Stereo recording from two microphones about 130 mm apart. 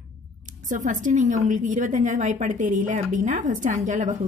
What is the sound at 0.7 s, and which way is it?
A woman's voice, 75° right (ahead or behind).